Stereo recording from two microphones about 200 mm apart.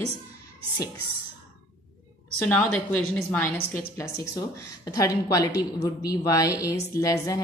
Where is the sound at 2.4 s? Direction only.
5° left (ahead or behind).